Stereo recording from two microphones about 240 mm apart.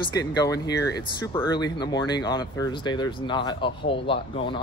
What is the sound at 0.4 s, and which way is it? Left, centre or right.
Speech, centre.